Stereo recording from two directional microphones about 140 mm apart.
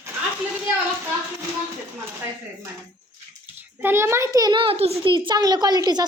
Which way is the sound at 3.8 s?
15° right (ahead or behind).